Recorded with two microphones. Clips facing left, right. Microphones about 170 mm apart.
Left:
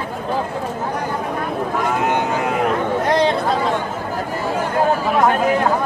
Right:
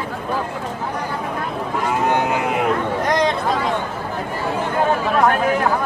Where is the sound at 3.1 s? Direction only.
30° left (ahead or behind).